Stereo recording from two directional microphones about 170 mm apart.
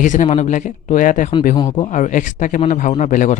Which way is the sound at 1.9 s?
50° left (ahead or behind).